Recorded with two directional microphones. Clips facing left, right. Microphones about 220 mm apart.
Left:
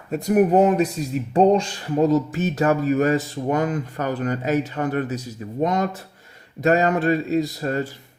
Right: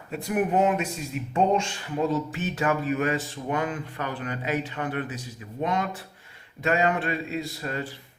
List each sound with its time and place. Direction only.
0.1 s speech: 40° left (ahead or behind)